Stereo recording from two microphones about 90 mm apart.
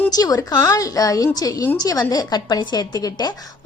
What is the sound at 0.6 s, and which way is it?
A woman's voice, 35° left (ahead or behind).